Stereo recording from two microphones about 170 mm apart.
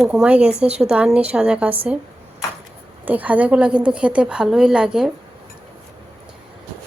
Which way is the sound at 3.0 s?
10° right (ahead or behind).